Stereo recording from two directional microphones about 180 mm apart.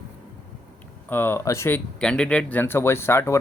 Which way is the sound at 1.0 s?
10° left (ahead or behind).